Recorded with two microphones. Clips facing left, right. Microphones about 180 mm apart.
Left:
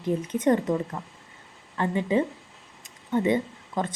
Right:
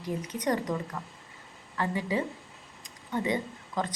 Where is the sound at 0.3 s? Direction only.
25° left (ahead or behind).